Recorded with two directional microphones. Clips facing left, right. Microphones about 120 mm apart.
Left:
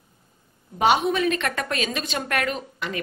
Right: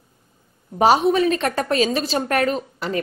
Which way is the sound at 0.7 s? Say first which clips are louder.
Right 5 dB; 35° right (ahead or behind).